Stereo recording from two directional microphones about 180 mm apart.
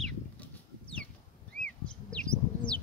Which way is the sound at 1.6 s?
5° left (ahead or behind).